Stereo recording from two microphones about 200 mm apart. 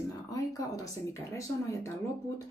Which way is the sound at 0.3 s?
15° left (ahead or behind).